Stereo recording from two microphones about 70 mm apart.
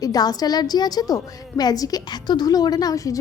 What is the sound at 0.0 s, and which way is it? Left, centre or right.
A woman's voice, left.